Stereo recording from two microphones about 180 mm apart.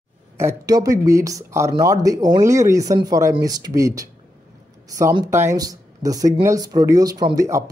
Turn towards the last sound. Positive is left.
turn(degrees=-20)  # may be behind; listen again after turning